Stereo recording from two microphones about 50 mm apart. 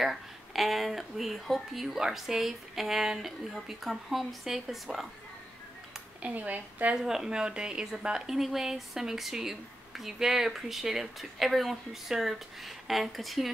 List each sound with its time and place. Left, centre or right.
0.0 s speech: centre
6.3 s a woman's voice: right
7.0 s a woman's voice: centre